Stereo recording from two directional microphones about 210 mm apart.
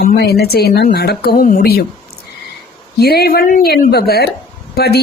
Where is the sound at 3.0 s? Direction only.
50° left (ahead or behind).